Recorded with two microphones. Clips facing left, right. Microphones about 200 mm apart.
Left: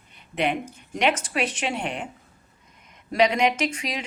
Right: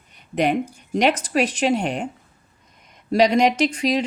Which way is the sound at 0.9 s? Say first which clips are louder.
Right 5 dB; 40° right (ahead or behind).